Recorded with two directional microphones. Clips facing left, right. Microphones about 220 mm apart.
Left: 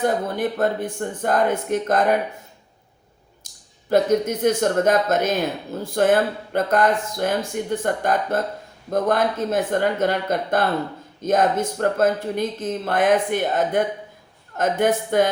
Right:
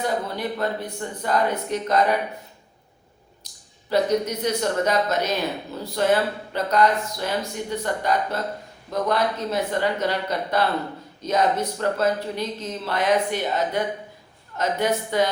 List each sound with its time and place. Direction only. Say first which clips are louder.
0.0 s speech: left 4 dB; 50° left (ahead or behind)
3.4 s a sound: right 1 dB; 50° left (ahead or behind)
3.8 s speech: left 3 dB; 50° left (ahead or behind)